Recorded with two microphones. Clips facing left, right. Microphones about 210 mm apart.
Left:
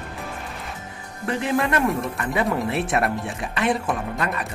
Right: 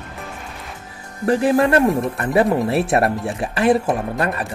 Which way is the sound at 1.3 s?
35° right (ahead or behind).